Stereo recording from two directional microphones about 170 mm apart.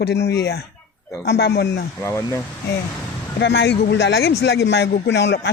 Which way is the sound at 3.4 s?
80° left.